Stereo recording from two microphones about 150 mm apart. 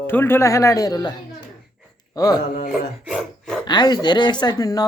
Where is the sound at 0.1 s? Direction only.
15° left (ahead or behind).